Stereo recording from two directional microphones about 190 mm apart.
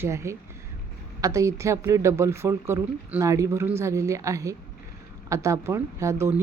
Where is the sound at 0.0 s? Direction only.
15° right (ahead or behind).